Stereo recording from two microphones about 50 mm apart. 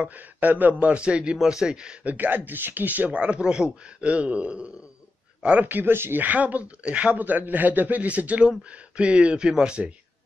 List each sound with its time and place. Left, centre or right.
0.0 s a man's voice: right; by 2.0 s centre
2.0 s a man's voice: right
3.1 s a man's voice: right
5.7 s speech: right
6.2 s a man's voice: right